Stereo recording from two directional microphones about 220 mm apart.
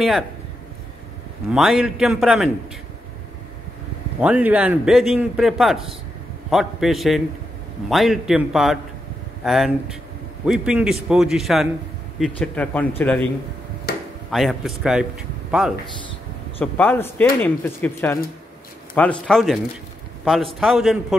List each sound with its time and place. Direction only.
1.5 s a man's voice: centre (ahead or behind)
4.2 s a man's voice: 5° right (ahead or behind)
13.9 s a sound: 45° left (ahead or behind)
14.3 s a man's voice: centre (ahead or behind)
16.5 s a man's voice: 10° left (ahead or behind)